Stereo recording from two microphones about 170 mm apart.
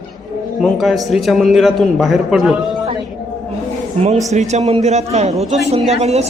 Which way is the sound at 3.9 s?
35° right (ahead or behind).